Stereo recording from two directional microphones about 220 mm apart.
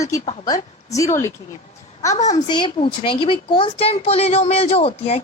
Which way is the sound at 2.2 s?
30° left (ahead or behind).